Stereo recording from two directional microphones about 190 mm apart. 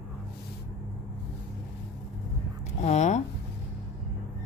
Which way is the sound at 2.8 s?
35° left (ahead or behind).